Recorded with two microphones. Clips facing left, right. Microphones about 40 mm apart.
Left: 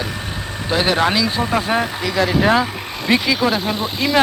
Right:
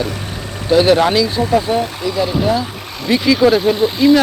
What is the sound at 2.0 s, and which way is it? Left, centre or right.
Speech, left.